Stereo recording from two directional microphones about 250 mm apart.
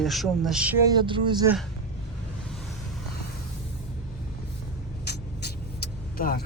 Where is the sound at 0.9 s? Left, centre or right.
Centre.